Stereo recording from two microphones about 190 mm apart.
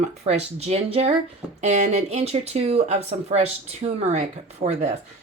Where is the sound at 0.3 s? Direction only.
35° right (ahead or behind).